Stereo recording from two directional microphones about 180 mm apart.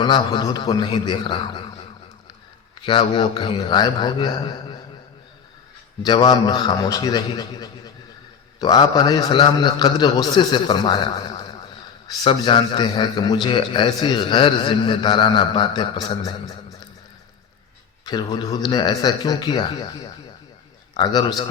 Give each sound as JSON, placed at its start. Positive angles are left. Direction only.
{"t": 0.0, "sound": "a man's voice", "side_deg": 25}
{"t": 3.0, "sound": "a man's voice", "side_deg": 25}
{"t": 6.0, "sound": "a man's voice", "side_deg": 25}
{"t": 18.0, "sound": "a man's voice", "side_deg": 25}